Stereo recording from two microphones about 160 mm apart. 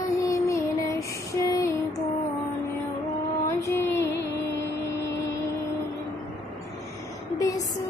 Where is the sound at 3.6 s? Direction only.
15° left (ahead or behind).